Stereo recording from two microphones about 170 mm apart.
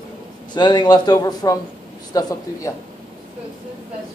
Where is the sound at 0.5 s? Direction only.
25° left (ahead or behind).